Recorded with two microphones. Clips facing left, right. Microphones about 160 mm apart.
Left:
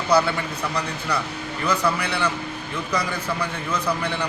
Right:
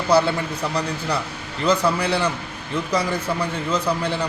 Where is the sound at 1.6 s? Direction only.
30° right (ahead or behind).